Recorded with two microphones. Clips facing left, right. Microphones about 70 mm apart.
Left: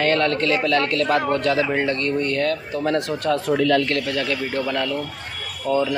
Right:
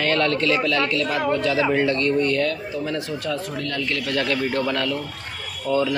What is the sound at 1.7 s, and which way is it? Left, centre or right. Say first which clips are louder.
Speech: right 2 dB; left.